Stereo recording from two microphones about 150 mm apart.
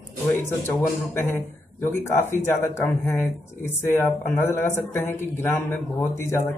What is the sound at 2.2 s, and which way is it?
Speech, 15° left (ahead or behind).